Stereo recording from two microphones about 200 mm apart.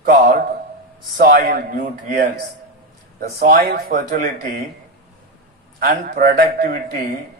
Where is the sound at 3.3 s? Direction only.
45° right (ahead or behind).